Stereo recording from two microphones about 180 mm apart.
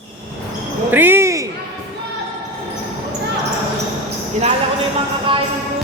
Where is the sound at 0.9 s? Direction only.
10° right (ahead or behind).